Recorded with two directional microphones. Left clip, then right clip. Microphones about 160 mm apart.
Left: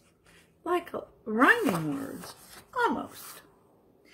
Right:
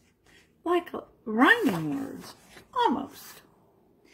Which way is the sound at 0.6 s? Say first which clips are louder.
Right 2 dB; 35° right (ahead or behind).